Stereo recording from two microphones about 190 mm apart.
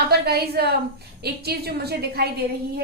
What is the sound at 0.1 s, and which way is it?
A woman's voice, 55° right (ahead or behind).